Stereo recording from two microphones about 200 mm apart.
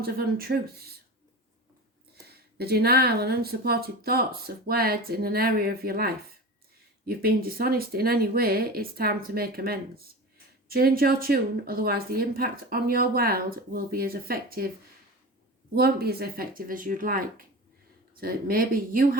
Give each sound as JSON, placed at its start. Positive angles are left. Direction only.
{"t": 0.0, "sound": "speech", "side_deg": -50}
{"t": 2.2, "sound": "speech", "side_deg": -50}
{"t": 15.7, "sound": "speech", "side_deg": -50}